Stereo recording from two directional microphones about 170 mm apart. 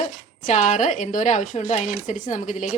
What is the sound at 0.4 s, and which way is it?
A woman's voice, 45° left (ahead or behind).